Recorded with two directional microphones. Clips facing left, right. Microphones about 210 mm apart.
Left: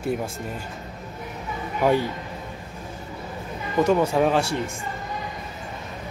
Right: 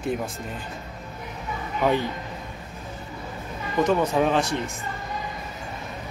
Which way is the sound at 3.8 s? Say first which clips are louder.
Left 2 dB; 10° left (ahead or behind).